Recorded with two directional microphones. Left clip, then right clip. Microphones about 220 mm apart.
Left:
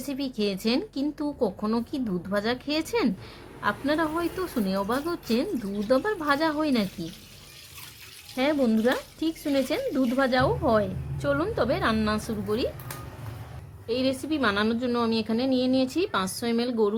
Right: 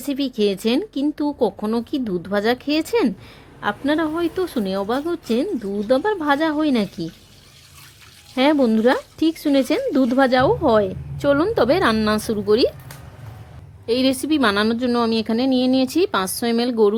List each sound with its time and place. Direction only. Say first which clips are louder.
0.1 s speech: right 9 dB; 25° right (ahead or behind)
8.4 s speech: right 8 dB; 25° right (ahead or behind)
13.8 s speech: right 8 dB; 30° right (ahead or behind)